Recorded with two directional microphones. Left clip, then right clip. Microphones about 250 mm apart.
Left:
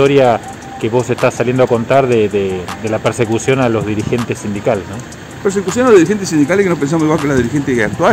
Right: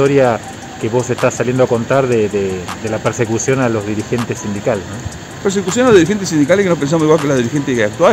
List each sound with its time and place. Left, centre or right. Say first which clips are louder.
0.0 s speech: left 2 dB; centre
5.4 s speech: left 1 dB; centre